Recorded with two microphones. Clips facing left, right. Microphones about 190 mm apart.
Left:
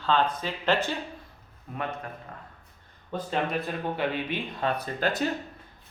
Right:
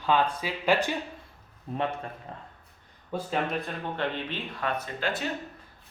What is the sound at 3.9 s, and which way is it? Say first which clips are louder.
Speech: left 1 dB; 10° left (ahead or behind).